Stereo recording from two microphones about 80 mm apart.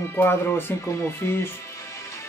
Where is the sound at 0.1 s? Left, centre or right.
Left.